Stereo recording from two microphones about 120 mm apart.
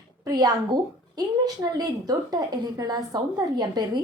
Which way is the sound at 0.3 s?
35° right (ahead or behind).